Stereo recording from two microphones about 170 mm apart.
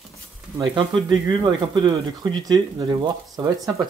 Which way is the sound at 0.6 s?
30° right (ahead or behind).